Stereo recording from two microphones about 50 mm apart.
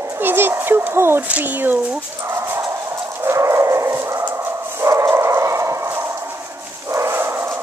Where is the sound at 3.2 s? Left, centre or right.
Right.